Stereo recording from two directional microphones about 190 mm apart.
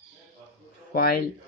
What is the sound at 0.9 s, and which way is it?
Speech, 50° left (ahead or behind).